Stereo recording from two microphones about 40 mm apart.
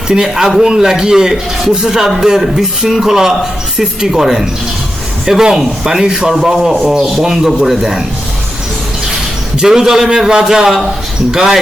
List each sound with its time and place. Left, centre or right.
0.1 s a man's voice: centre
9.6 s a man's voice: centre